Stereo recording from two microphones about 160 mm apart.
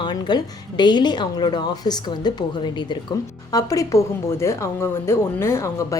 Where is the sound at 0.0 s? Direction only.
25° left (ahead or behind).